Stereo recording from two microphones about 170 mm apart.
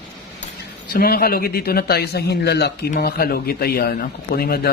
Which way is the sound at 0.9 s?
65° left (ahead or behind).